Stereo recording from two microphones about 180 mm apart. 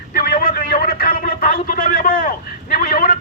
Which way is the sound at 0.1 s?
50° left (ahead or behind).